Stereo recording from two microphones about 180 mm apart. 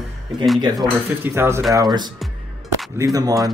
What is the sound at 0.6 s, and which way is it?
Speech, 20° right (ahead or behind).